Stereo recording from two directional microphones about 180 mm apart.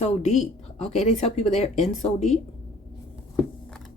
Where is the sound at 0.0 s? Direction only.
40° left (ahead or behind).